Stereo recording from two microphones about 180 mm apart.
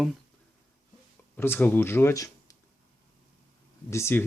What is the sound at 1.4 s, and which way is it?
Speech, 10° left (ahead or behind).